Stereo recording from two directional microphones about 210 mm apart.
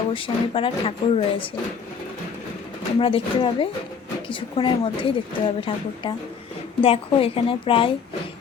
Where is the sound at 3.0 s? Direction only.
25° left (ahead or behind).